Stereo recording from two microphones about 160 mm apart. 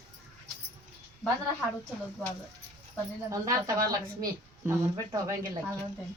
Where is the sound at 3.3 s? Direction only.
20° right (ahead or behind).